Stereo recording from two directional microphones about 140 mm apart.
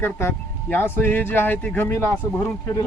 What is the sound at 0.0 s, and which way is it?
Speech, 15° left (ahead or behind).